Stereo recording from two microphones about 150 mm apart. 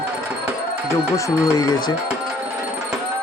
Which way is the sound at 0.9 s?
20° left (ahead or behind).